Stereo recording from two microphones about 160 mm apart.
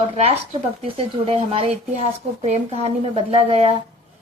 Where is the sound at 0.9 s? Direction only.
35° right (ahead or behind).